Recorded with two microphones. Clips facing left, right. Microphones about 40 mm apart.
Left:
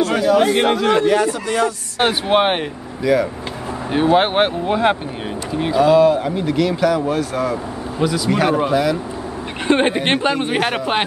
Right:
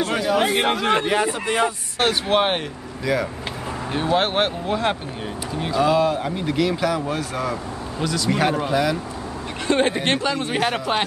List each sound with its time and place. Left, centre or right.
0.1 s a man's voice: centre
0.8 s a man's voice: right
2.0 s speech: centre
3.0 s speech: centre
3.9 s speech: centre
5.8 s a man's voice: centre
9.7 s a man's voice: left
10.5 s speech: centre